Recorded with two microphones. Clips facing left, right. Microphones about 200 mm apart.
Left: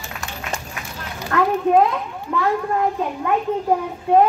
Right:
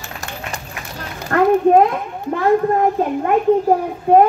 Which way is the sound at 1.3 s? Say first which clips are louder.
Right 5 dB; 50° right (ahead or behind).